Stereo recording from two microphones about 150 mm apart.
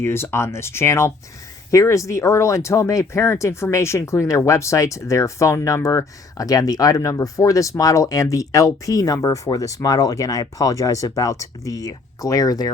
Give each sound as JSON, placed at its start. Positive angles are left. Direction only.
{"t": 0.0, "sound": "speech", "side_deg": 15}